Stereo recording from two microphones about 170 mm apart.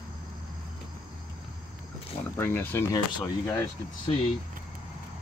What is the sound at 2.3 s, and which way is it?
Speech, 10° left (ahead or behind).